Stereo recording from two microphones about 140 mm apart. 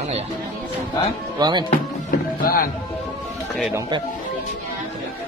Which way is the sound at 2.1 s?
90° left.